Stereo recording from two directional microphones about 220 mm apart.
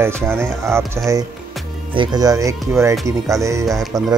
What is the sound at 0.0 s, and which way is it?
Speech, 10° right (ahead or behind).